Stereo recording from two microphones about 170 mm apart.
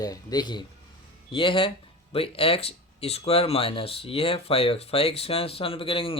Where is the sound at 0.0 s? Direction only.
20° left (ahead or behind).